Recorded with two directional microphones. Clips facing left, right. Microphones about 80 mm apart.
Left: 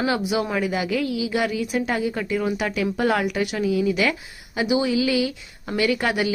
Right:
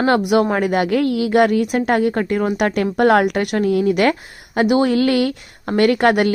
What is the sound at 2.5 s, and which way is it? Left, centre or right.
Speech, right.